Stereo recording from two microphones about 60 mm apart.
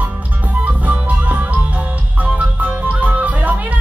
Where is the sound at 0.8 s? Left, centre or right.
Right.